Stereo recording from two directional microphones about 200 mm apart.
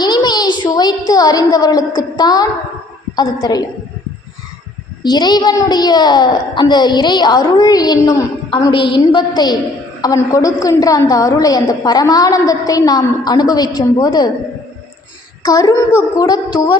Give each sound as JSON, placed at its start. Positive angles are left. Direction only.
{"t": 0.0, "sound": "a woman's voice", "side_deg": 20}
{"t": 5.0, "sound": "a child's voice", "side_deg": 20}
{"t": 15.4, "sound": "a child's voice", "side_deg": 20}